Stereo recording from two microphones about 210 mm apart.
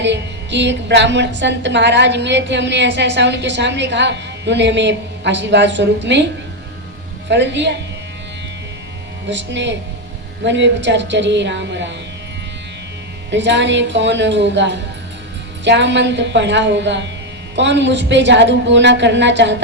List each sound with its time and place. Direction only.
0.0 s a woman's voice: 55° right (ahead or behind)
7.3 s a woman's voice: 55° right (ahead or behind)
9.3 s a woman's voice: 60° right (ahead or behind)
13.3 s a woman's voice: 60° right (ahead or behind)